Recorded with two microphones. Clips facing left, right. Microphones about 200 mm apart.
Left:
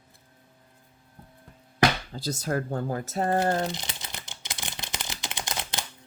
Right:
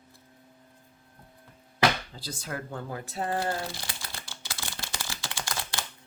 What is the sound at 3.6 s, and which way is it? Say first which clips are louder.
Crumpling: left 6 dB; 20° left (ahead or behind).